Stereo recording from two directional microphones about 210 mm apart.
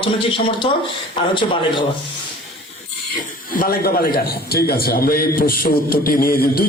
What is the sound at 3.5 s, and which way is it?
A man's voice, 45° left (ahead or behind).